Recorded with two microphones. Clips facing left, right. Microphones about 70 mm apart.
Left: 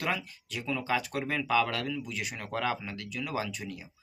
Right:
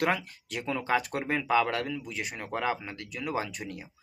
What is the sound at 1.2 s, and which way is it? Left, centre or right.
Speech, centre.